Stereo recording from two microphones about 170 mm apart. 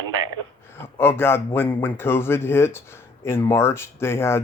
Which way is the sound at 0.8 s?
15° left (ahead or behind).